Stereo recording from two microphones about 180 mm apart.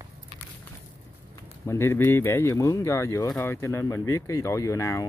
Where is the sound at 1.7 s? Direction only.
15° left (ahead or behind).